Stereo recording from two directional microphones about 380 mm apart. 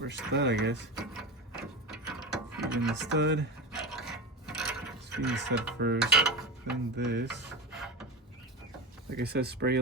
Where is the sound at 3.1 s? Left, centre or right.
Right.